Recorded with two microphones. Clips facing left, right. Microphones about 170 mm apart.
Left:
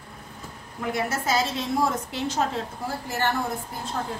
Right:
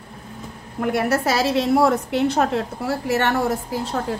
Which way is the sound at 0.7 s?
60° right (ahead or behind).